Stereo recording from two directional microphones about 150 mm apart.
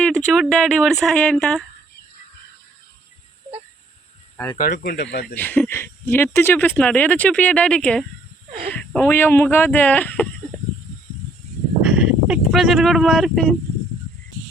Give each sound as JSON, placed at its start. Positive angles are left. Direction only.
{"t": 0.0, "sound": "speech", "side_deg": 5}
{"t": 4.5, "sound": "speech", "side_deg": 80}
{"t": 5.3, "sound": "speech", "side_deg": 10}
{"t": 11.8, "sound": "speech", "side_deg": -5}